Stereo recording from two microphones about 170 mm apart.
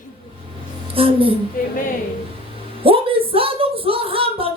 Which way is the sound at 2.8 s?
35° right (ahead or behind).